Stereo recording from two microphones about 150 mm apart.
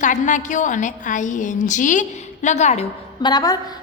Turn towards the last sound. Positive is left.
turn(degrees=25)  # may be behind; listen again after turning